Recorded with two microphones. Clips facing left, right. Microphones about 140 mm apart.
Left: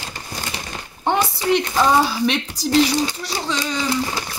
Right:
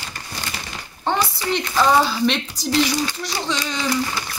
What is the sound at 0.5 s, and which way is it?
Speech, 15° left (ahead or behind).